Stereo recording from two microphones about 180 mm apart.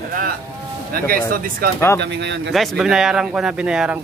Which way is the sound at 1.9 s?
75° right (ahead or behind).